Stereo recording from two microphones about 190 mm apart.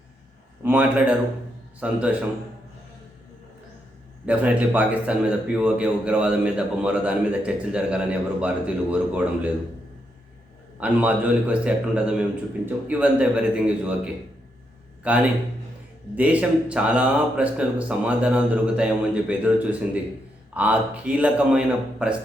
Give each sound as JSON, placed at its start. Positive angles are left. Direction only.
{"t": 0.6, "sound": "a man's voice", "side_deg": -10}
{"t": 4.3, "sound": "a man's voice", "side_deg": -5}
{"t": 10.8, "sound": "a man's voice", "side_deg": -10}